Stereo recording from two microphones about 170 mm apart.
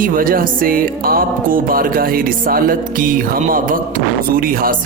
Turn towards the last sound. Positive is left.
turn(degrees=-60)  # may be behind; listen again after turning